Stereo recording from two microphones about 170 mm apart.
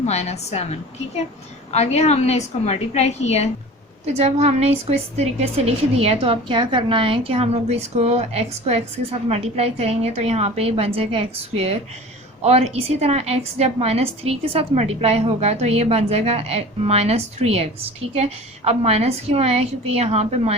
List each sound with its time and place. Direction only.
0.0 s a woman's voice: 40° left (ahead or behind)
4.0 s a woman's voice: 40° right (ahead or behind)